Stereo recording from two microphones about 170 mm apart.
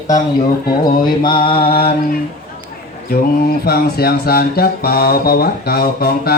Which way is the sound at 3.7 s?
65° left (ahead or behind).